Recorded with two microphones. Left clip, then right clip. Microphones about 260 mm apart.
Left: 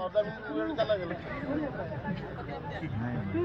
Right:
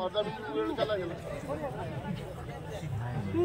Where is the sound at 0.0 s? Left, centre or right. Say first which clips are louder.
Left 2 dB; left.